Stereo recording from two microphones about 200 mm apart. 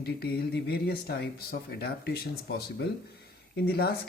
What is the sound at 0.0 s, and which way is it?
Speech, 50° left (ahead or behind).